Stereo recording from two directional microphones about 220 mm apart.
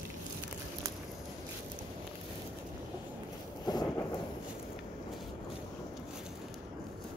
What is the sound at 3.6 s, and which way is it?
Thunder, 20° left (ahead or behind).